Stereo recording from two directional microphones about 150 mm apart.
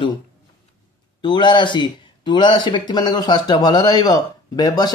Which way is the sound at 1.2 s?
30° left (ahead or behind).